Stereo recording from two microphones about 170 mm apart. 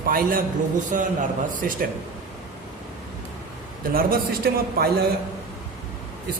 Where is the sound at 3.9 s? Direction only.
60° right (ahead or behind).